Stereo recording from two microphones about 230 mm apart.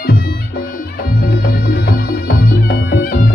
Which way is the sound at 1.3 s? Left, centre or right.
Left.